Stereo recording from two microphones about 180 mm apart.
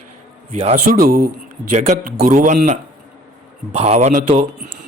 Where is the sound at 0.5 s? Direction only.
40° right (ahead or behind).